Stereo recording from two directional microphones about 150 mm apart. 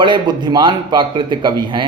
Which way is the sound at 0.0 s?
30° right (ahead or behind).